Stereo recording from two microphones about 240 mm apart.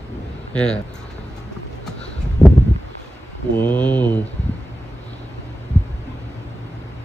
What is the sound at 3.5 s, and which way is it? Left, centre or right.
Speech, centre.